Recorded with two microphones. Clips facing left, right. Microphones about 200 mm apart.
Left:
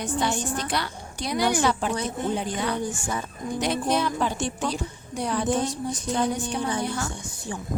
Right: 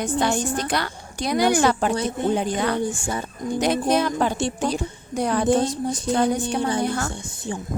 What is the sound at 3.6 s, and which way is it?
A woman's voice, 45° right (ahead or behind).